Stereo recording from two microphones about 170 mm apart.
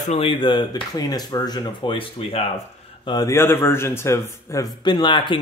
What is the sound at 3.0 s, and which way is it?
A man's voice, 20° left (ahead or behind).